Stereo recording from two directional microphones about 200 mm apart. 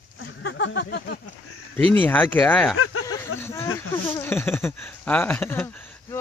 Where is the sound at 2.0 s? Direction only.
10° left (ahead or behind).